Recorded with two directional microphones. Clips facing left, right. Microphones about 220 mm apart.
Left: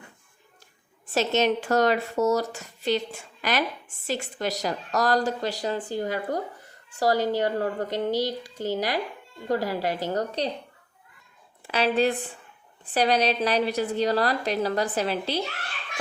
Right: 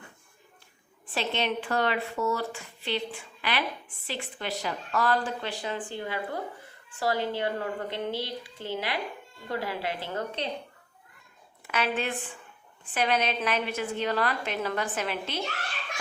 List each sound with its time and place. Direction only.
1.1 s speech: 45° left (ahead or behind)
11.6 s a woman's voice: 35° left (ahead or behind)